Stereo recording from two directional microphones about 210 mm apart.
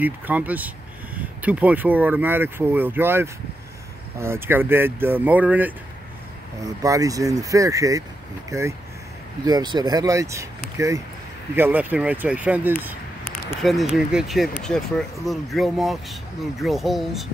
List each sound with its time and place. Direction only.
0.0 s speech: 10° right (ahead or behind)